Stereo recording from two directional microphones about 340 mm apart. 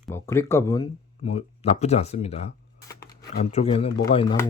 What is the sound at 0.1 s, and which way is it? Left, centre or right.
Speech, centre.